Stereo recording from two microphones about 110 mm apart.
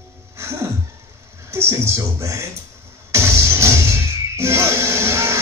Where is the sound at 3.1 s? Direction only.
25° right (ahead or behind).